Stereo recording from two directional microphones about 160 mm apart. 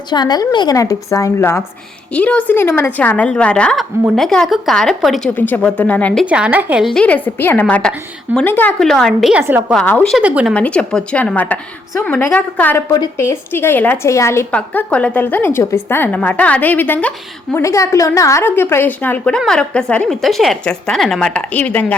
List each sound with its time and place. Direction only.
0.1 s a woman's voice: 25° left (ahead or behind); by 5.3 s centre (ahead or behind)
5.3 s a woman's voice: 10° left (ahead or behind)
6.2 s speech: 5° right (ahead or behind)
6.9 s a woman's voice: 10° left (ahead or behind)
9.4 s speech: 15° right (ahead or behind)
9.7 s a woman's voice: 10° left (ahead or behind)
10.2 s speech: 5° right (ahead or behind)
10.5 s a woman's voice: 10° left (ahead or behind)